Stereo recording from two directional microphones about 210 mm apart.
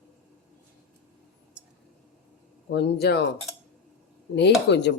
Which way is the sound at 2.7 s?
50° left (ahead or behind).